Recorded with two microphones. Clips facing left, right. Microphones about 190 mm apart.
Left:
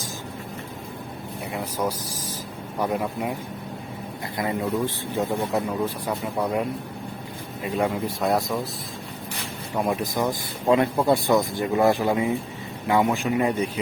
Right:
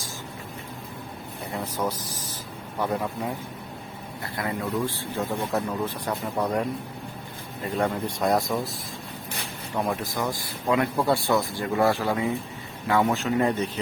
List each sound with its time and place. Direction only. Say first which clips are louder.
1.5 s speech: left 1 dB; 10° left (ahead or behind)
4.4 s speech: left 4 dB; 20° left (ahead or behind)
5.1 s speech: left 3 dB; 10° left (ahead or behind)
9.7 s speech: left 3 dB; 15° left (ahead or behind)